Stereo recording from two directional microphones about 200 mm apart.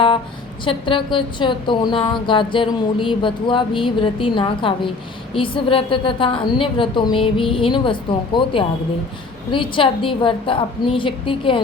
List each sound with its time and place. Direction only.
0.6 s a woman's voice: 25° left (ahead or behind)